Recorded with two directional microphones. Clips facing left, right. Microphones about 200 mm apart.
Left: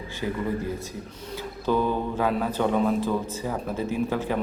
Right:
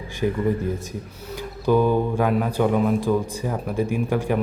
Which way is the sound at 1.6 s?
15° right (ahead or behind).